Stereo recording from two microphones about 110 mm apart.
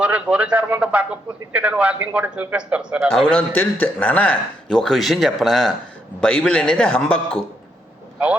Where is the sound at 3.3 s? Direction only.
15° left (ahead or behind).